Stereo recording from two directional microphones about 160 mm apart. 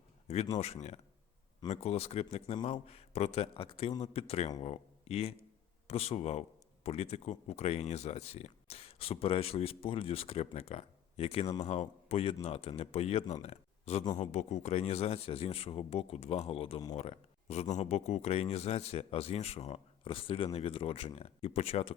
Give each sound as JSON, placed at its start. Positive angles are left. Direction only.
{"t": 0.6, "sound": "speech", "side_deg": 45}